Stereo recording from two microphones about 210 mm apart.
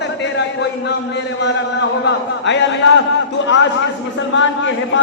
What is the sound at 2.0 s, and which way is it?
Speech, 55° left (ahead or behind).